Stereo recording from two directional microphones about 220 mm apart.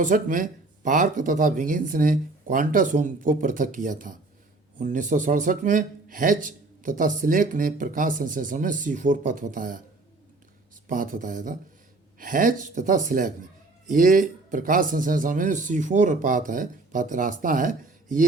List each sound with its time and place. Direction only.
0.0 s a man's voice: 35° right (ahead or behind)
10.8 s a man's voice: 40° right (ahead or behind)